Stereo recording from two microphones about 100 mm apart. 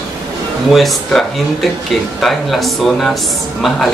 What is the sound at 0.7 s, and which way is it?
Speech, centre (ahead or behind).